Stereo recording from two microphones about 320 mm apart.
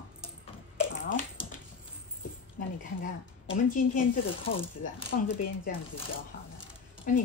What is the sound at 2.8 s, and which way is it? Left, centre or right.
A woman's voice, left.